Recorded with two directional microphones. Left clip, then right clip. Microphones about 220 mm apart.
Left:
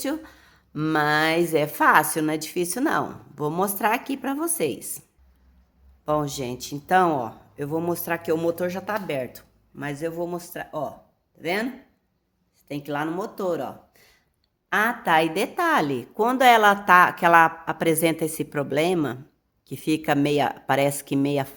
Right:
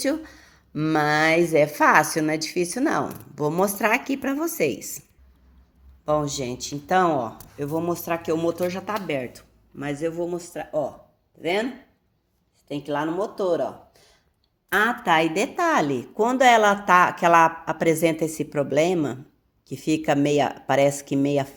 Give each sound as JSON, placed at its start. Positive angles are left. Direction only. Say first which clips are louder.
{"t": 0.0, "sound": "a woman's voice", "louder": "right 4 dB", "side_deg": 0}
{"t": 6.1, "sound": "speech", "louder": "right 1 dB", "side_deg": 15}
{"t": 12.6, "sound": "speech", "louder": "right 2 dB", "side_deg": 25}
{"t": 14.7, "sound": "speech", "louder": "right 1 dB", "side_deg": 15}